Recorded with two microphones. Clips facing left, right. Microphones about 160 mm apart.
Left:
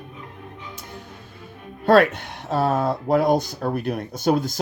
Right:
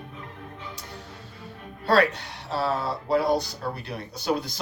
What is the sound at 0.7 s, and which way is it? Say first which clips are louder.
Speech: left 2 dB; 50° left (ahead or behind).